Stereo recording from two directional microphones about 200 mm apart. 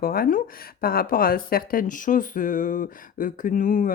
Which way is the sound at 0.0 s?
50° left (ahead or behind).